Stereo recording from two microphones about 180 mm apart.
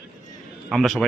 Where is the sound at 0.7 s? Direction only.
Centre (ahead or behind).